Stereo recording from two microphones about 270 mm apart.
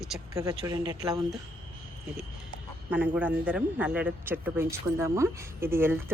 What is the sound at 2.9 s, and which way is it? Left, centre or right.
Speech, centre.